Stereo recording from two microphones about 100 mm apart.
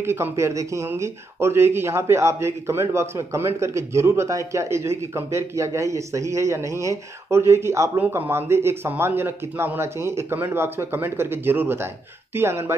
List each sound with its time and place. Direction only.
0.0 s speech: 25° right (ahead or behind)